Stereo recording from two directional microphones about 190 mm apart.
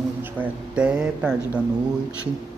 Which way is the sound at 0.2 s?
5° right (ahead or behind).